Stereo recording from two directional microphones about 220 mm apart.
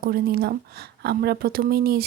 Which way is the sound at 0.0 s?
45° right (ahead or behind).